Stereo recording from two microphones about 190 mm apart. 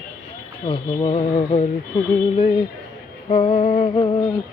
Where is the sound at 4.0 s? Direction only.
20° left (ahead or behind).